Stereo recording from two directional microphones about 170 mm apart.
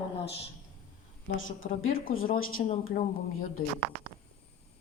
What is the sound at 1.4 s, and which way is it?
Speech, 55° left (ahead or behind).